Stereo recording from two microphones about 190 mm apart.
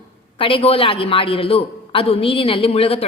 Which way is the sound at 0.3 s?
30° left (ahead or behind).